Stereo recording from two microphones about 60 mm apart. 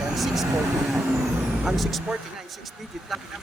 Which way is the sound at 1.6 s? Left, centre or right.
Centre.